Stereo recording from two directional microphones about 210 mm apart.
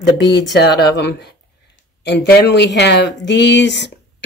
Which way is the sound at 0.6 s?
55° left (ahead or behind).